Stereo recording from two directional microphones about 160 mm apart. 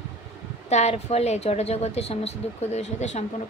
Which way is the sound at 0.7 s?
45° left (ahead or behind).